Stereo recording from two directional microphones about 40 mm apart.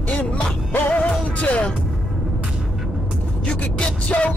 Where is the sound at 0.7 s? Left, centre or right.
Left.